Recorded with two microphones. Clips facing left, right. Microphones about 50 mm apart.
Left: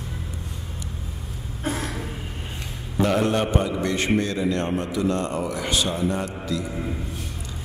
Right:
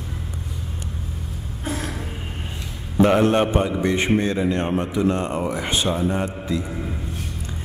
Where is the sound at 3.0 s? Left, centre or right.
Right.